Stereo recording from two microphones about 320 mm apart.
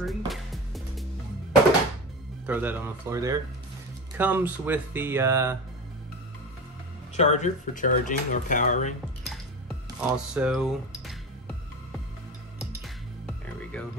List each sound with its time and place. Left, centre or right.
0.0 s music: centre
2.4 s speech: centre
7.2 s speech: left
9.2 s dishes: centre
12.5 s music: centre